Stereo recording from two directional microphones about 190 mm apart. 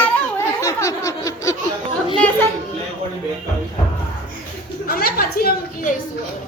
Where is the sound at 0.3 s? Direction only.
15° left (ahead or behind).